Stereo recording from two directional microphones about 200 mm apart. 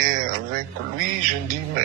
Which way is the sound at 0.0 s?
45° right (ahead or behind).